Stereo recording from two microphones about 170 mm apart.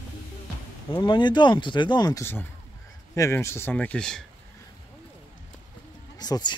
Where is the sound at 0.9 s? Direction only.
30° left (ahead or behind); by 4.2 s 5° left (ahead or behind).